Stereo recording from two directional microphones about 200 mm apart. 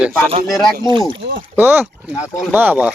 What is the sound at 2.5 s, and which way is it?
Speech, 10° right (ahead or behind).